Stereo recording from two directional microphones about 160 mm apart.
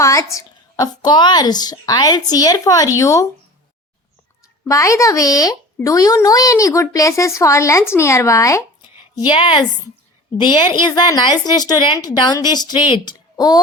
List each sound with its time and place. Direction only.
0.0 s speech: 20° left (ahead or behind)
4.7 s speech: 20° left (ahead or behind)